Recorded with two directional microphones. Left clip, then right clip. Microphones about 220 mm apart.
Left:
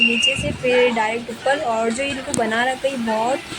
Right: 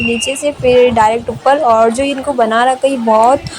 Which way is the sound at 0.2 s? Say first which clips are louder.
Right 4 dB; 25° right (ahead or behind).